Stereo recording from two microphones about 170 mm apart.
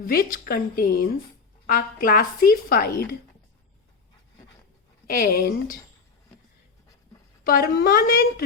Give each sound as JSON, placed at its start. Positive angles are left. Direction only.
{"t": 0.0, "sound": "speech", "side_deg": 55}
{"t": 5.0, "sound": "speech", "side_deg": 60}
{"t": 7.4, "sound": "speech", "side_deg": 60}